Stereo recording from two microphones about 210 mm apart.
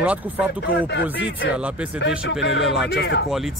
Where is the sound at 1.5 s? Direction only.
5° right (ahead or behind).